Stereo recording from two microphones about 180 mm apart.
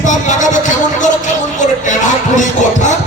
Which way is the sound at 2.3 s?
45° left (ahead or behind).